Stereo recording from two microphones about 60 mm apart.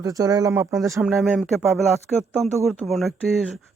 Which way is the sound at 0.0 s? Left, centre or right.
Right.